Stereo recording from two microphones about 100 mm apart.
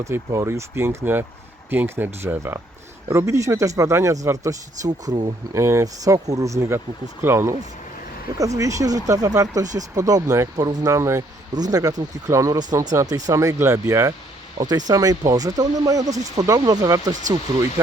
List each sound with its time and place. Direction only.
0.0 s speech: 30° right (ahead or behind)
5.5 s speech: 30° right (ahead or behind)